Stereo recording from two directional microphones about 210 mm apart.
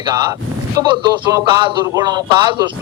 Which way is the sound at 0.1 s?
20° right (ahead or behind).